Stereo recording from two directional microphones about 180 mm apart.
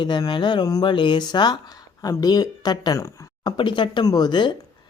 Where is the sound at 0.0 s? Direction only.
25° left (ahead or behind).